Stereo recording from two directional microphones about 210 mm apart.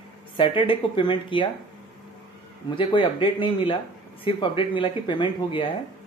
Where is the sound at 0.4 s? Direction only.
25° left (ahead or behind).